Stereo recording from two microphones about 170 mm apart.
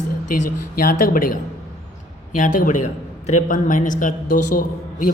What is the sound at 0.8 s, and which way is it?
A woman's voice, 55° left (ahead or behind).